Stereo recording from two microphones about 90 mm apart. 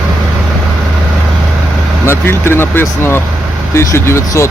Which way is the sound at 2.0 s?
25° left (ahead or behind).